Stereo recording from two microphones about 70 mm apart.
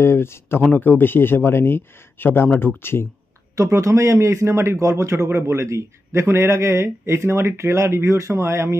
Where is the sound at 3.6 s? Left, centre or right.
Right.